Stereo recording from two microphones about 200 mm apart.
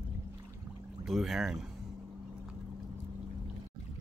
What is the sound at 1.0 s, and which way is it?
Speech, centre (ahead or behind).